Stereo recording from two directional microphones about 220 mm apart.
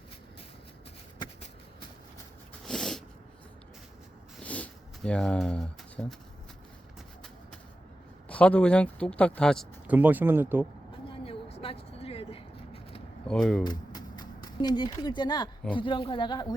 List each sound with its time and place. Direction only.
2.6 s cat: 5° left (ahead or behind)
4.4 s a sound: 5° left (ahead or behind)
8.3 s speech: 5° left (ahead or behind); by 10.7 s 10° right (ahead or behind)
11.1 s vehicle: 25° left (ahead or behind)
13.2 s speech: 5° left (ahead or behind)
13.7 s a sound: 20° left (ahead or behind)
15.7 s speech: 20° left (ahead or behind)